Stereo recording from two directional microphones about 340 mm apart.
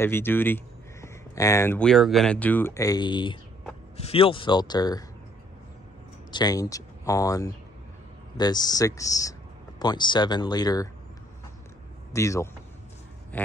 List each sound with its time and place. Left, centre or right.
0.0 s speech: centre
6.3 s speech: centre
12.1 s a man's voice: centre
13.3 s a sound: centre